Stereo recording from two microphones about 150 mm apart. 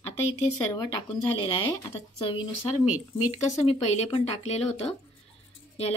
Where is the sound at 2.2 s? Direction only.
35° left (ahead or behind).